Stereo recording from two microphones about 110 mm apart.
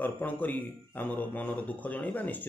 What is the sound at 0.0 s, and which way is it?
Speech, 15° left (ahead or behind).